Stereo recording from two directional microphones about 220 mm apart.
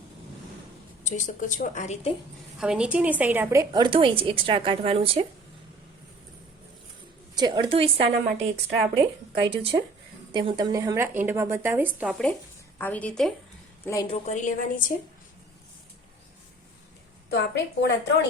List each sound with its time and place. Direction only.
1.0 s a woman's voice: 35° left (ahead or behind)
2.6 s a woman's voice: 5° right (ahead or behind); by 5.2 s 25° right (ahead or behind)
7.3 s a woman's voice: 20° right (ahead or behind)
9.4 s a woman's voice: 20° right (ahead or behind)
12.8 s speech: 5° left (ahead or behind)
13.8 s a woman's voice: 15° left (ahead or behind)
14.1 s a woman's voice: 35° left (ahead or behind)
17.5 s a woman's voice: 55° left (ahead or behind)